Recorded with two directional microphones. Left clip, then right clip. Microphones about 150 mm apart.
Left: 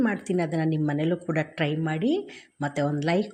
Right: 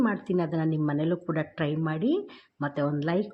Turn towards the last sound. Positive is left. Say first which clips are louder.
# left 2 dB
turn(degrees=20)  # may be behind; listen again after turning